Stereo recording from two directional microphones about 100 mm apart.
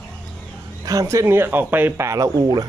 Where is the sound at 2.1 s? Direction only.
35° right (ahead or behind).